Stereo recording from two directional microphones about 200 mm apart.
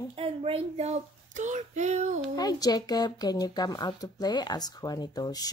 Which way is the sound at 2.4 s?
20° left (ahead or behind).